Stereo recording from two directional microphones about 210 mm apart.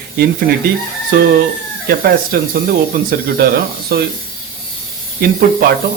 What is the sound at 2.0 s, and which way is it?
A man's voice, 45° right (ahead or behind).